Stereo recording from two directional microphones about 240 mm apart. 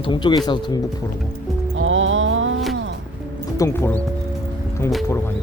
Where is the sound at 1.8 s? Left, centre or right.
Right.